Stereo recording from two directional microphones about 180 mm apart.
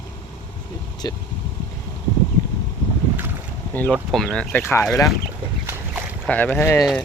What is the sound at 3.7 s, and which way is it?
Speech, 5° left (ahead or behind).